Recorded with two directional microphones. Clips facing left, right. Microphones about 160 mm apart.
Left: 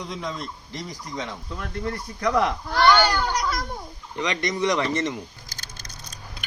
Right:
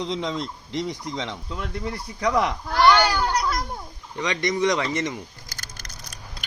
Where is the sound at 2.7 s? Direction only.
Centre (ahead or behind).